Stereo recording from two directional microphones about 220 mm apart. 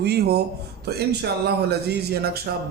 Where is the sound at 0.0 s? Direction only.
45° right (ahead or behind).